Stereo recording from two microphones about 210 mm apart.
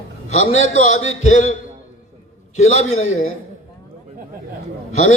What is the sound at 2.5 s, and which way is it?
Speech, 35° left (ahead or behind).